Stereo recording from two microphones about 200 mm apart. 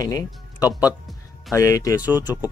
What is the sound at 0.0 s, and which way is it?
Speech, 15° left (ahead or behind).